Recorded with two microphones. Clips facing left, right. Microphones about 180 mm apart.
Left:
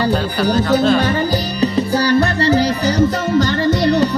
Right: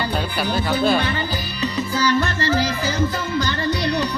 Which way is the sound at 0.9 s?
40° left (ahead or behind).